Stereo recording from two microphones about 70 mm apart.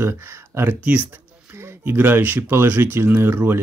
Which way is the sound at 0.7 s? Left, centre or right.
Right.